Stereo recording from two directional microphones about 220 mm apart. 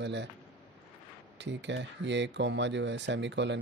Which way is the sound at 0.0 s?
55° right (ahead or behind).